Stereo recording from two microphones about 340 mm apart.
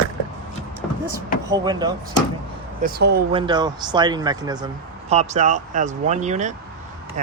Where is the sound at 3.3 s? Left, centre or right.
Centre.